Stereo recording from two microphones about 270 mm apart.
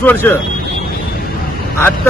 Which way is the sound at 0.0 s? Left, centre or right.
Centre.